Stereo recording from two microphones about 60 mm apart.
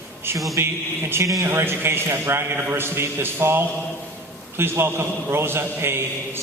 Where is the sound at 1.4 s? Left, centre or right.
Right.